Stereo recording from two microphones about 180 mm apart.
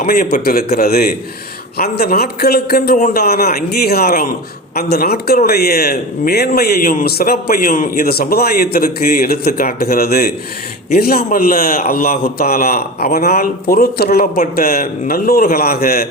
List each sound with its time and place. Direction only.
0.0 s a man's voice: 50° left (ahead or behind)